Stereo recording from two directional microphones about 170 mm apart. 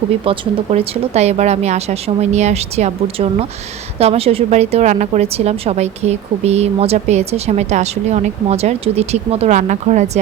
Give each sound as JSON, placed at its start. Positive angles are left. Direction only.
{"t": 0.3, "sound": "a woman's voice", "side_deg": -40}